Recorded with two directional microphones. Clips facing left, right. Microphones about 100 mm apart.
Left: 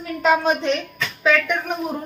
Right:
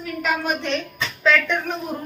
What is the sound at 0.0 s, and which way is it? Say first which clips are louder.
Speech: left 6 dB; 30° left (ahead or behind).